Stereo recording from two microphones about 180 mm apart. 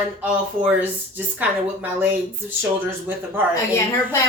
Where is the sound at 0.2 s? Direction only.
5° right (ahead or behind).